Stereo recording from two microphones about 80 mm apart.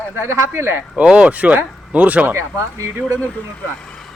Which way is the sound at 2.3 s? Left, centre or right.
Right.